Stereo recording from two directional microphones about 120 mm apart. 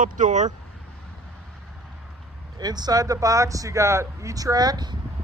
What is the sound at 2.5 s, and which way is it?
Speech, 35° right (ahead or behind).